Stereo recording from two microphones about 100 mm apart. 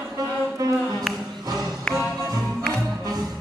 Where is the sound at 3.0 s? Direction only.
40° right (ahead or behind).